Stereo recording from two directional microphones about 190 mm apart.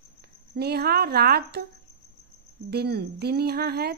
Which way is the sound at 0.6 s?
55° right (ahead or behind).